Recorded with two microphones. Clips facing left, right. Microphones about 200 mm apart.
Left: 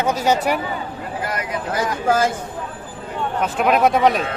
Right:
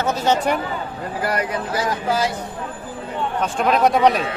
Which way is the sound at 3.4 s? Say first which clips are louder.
Left 1 dB; 5° left (ahead or behind).